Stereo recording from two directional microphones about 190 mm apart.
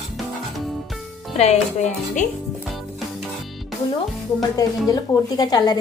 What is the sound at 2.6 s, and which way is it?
Music, centre (ahead or behind).